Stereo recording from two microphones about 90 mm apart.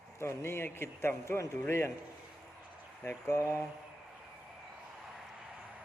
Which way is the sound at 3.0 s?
35° left (ahead or behind).